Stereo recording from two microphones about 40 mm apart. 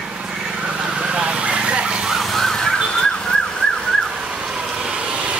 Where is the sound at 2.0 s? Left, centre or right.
Centre.